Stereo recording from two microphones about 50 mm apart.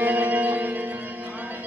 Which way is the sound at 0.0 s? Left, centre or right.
Right.